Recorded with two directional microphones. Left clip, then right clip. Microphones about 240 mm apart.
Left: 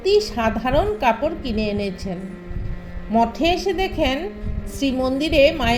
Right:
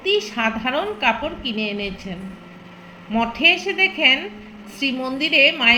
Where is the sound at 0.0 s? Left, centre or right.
Left.